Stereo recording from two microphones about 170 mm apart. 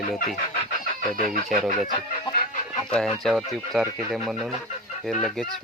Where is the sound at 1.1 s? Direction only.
55° right (ahead or behind).